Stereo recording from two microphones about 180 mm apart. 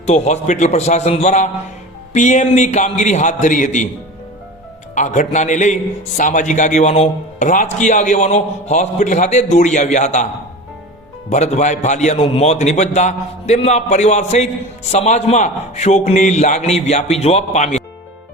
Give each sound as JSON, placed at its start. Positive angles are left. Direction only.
{"t": 0.0, "sound": "a man's voice", "side_deg": 40}
{"t": 4.9, "sound": "a man's voice", "side_deg": 40}
{"t": 11.3, "sound": "a man's voice", "side_deg": 40}